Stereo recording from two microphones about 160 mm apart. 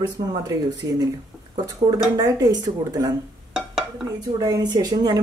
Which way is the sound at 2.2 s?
25° right (ahead or behind).